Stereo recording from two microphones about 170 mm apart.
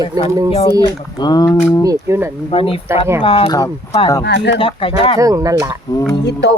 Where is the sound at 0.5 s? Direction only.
30° left (ahead or behind).